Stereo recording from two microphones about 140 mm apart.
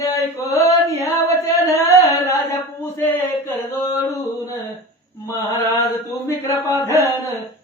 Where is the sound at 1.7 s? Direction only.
20° left (ahead or behind).